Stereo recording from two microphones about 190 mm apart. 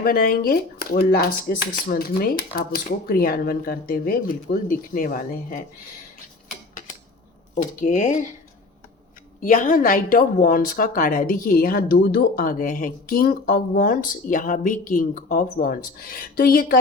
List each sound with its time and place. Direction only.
0.0 s speech: 50° left (ahead or behind)
7.5 s speech: 40° left (ahead or behind)
9.4 s speech: 45° left (ahead or behind)